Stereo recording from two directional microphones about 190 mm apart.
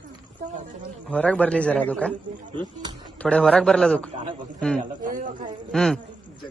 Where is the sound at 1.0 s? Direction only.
5° left (ahead or behind).